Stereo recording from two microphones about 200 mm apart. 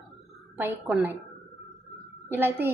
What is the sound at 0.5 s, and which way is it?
Speech, 5° right (ahead or behind).